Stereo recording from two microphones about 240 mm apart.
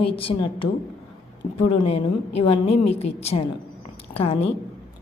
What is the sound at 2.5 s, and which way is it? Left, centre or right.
A woman's voice, left.